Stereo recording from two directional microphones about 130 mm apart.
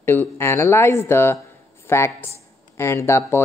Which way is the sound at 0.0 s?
15° left (ahead or behind).